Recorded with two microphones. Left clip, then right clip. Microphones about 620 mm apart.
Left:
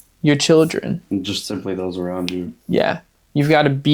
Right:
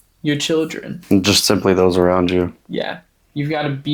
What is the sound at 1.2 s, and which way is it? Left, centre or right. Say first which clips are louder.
Speech: right 10 dB; right.